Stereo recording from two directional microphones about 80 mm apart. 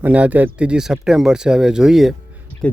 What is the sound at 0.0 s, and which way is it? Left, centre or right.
Speech, centre.